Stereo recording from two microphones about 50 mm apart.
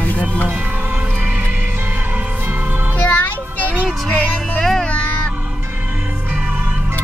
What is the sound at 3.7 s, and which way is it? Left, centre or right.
Music, right.